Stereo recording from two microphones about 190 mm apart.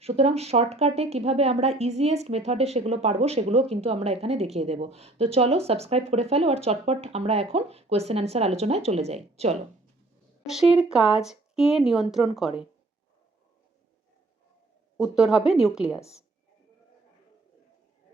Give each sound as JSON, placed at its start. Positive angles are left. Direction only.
{"t": 0.0, "sound": "speech", "side_deg": -35}
{"t": 10.5, "sound": "speech", "side_deg": -5}
{"t": 14.9, "sound": "speech", "side_deg": -5}